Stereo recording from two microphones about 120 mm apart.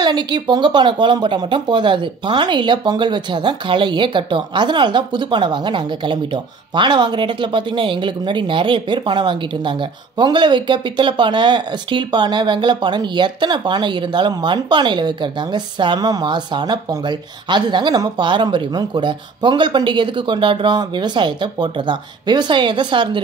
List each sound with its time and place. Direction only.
0.0 s speech: 40° right (ahead or behind)